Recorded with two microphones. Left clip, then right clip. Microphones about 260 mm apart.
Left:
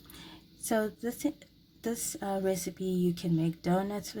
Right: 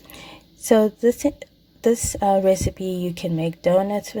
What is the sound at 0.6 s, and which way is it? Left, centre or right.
A woman's voice, centre.